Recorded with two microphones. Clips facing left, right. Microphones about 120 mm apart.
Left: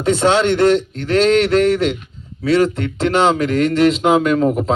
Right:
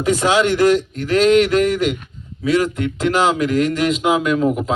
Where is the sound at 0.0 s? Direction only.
30° left (ahead or behind).